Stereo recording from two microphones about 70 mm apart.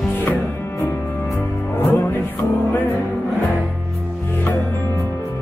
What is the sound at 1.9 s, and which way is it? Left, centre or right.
Music, left.